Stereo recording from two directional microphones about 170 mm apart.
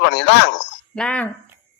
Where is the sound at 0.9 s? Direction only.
5° left (ahead or behind).